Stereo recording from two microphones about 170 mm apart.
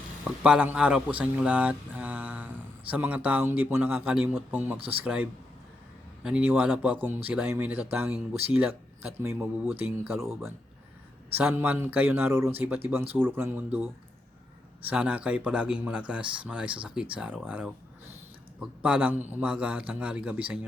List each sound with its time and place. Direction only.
0.4 s a man's voice: 5° right (ahead or behind)
14.8 s a man's voice: 10° right (ahead or behind)